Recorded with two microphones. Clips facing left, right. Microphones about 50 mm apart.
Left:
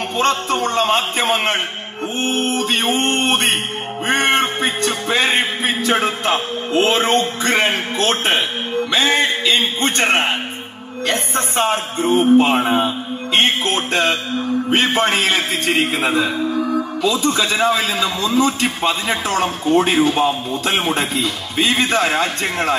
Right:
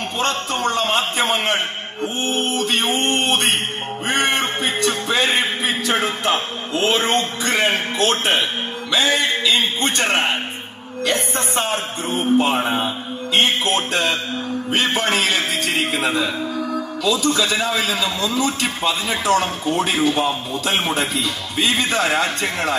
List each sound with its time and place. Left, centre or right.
0.2 s a man's voice: left